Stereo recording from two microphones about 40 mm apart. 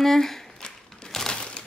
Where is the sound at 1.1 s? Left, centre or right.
Centre.